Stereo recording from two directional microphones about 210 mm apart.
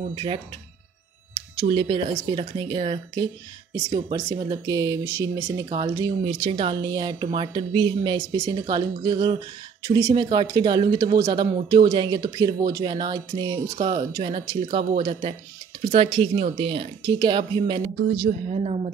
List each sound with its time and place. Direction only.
0.1 s speech: 25° right (ahead or behind)
4.3 s speech: 20° right (ahead or behind)
15.9 s speech: 25° right (ahead or behind)
18.0 s a woman's voice: 45° right (ahead or behind); by 18.9 s 30° right (ahead or behind)